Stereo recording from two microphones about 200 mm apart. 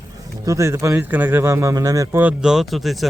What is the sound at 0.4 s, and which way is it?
Speech, 15° right (ahead or behind).